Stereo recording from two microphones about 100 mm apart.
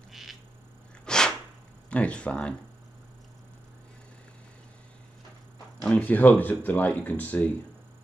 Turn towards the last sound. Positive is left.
turn(degrees=15)  # may be behind; listen again after turning